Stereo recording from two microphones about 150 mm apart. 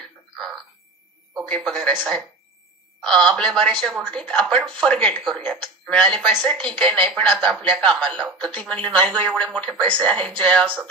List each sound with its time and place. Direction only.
1.4 s speech: 5° left (ahead or behind)
3.3 s speech: 5° left (ahead or behind)